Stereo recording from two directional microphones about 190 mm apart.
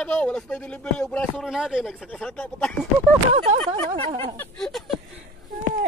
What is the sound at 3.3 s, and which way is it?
Speech, 35° right (ahead or behind).